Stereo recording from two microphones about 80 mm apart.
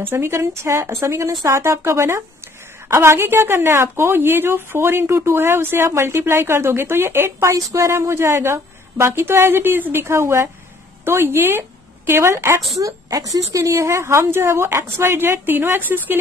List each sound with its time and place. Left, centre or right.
0.1 s a woman's voice: right